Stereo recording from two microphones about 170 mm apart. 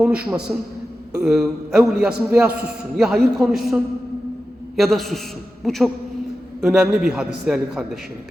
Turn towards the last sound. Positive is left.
turn(degrees=-5)  # may be behind; listen again after turning